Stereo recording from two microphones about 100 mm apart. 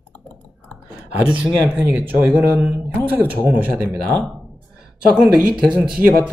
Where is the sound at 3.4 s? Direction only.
15° right (ahead or behind).